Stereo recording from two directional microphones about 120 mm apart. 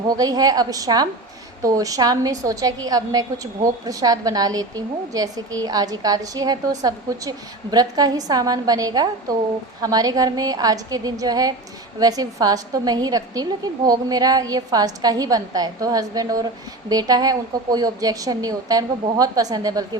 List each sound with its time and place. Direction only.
0.2 s a woman's voice: 30° right (ahead or behind)